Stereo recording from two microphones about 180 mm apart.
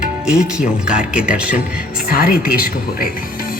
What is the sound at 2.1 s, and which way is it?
Speech, 55° left (ahead or behind).